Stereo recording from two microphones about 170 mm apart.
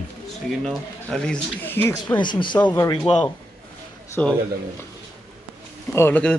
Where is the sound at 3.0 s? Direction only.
5° left (ahead or behind).